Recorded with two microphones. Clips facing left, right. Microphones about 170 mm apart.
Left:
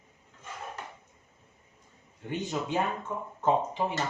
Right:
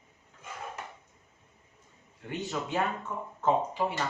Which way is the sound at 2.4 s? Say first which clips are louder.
Left 1 dB; 20° left (ahead or behind).